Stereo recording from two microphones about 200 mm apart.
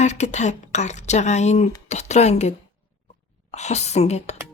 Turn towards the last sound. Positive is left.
turn(degrees=35)  # may be behind; listen again after turning